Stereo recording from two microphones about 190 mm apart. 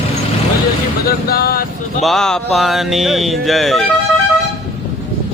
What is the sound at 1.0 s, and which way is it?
Speech, 55° left (ahead or behind).